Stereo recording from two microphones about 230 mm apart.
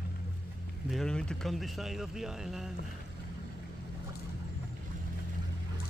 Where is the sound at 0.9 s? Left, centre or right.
Centre.